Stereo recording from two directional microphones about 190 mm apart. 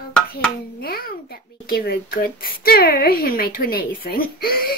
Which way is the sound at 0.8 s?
50° left (ahead or behind).